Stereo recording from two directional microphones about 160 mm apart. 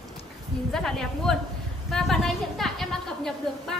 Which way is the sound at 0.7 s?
5° left (ahead or behind).